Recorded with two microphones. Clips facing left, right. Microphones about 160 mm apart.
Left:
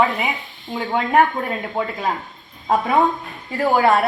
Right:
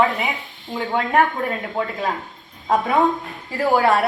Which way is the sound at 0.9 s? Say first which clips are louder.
Left 2 dB; 20° left (ahead or behind).